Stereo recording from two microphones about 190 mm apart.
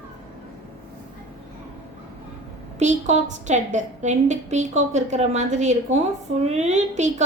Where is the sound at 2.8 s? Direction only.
40° right (ahead or behind).